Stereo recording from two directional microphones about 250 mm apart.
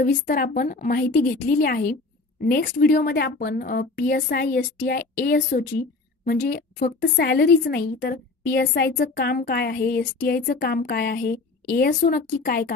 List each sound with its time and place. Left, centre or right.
0.0 s a woman's voice: left